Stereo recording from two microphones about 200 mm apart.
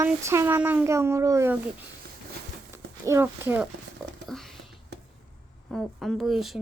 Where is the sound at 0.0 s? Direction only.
15° right (ahead or behind).